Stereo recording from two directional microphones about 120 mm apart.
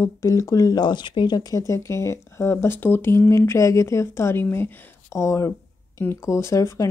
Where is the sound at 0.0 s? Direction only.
25° left (ahead or behind).